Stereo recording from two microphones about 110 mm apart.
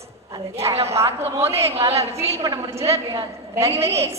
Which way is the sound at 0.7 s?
65° right (ahead or behind).